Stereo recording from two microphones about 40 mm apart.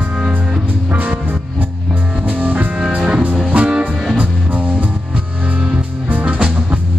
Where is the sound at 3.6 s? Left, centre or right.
Right.